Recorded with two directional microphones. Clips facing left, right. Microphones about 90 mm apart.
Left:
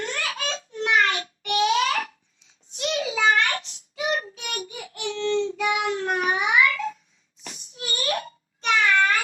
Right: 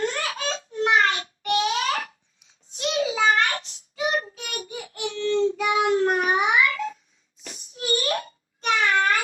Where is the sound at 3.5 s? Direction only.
35° right (ahead or behind).